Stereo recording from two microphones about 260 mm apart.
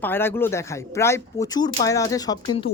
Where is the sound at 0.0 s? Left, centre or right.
Centre.